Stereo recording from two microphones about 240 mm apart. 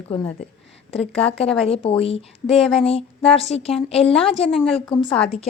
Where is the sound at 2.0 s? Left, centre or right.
Left.